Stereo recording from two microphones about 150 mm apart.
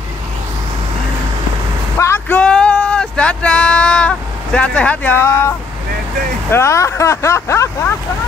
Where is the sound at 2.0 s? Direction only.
15° left (ahead or behind).